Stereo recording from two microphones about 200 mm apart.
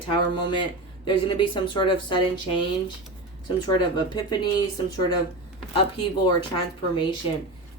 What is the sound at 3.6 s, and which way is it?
Speech, 20° left (ahead or behind).